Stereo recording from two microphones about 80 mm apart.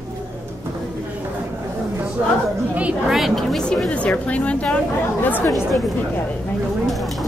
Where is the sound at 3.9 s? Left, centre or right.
Centre.